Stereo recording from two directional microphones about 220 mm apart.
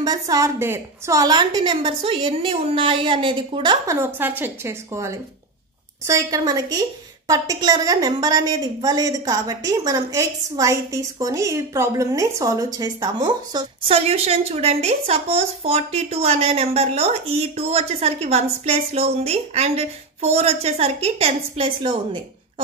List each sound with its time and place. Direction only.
0.0 s a woman's voice: 15° right (ahead or behind)